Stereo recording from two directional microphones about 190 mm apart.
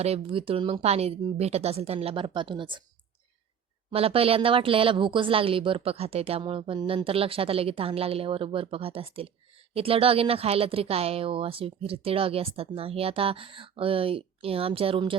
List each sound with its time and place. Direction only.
0.0 s speech: 30° right (ahead or behind)
3.9 s speech: 30° right (ahead or behind)